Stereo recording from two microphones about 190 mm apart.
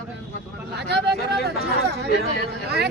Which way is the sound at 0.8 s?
60° right (ahead or behind).